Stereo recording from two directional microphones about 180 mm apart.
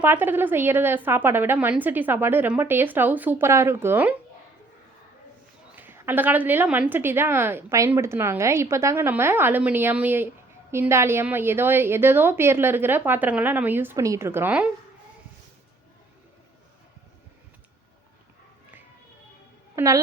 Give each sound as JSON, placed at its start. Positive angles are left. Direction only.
{"t": 0.0, "sound": "a woman's voice", "side_deg": -10}
{"t": 5.7, "sound": "a woman's voice", "side_deg": -10}
{"t": 19.7, "sound": "a woman's voice", "side_deg": -15}